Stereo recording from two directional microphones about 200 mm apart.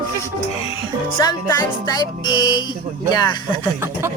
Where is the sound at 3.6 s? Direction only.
10° right (ahead or behind).